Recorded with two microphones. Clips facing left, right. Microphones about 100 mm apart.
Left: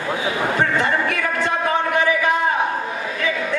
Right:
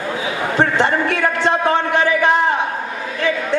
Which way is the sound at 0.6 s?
30° right (ahead or behind).